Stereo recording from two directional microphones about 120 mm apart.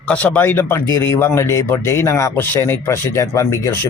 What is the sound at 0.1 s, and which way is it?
Speech, 10° left (ahead or behind).